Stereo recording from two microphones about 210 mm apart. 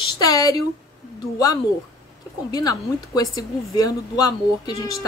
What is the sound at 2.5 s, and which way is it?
Speech, 20° left (ahead or behind).